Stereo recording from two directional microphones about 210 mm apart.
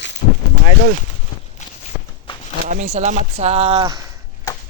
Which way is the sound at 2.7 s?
35° right (ahead or behind).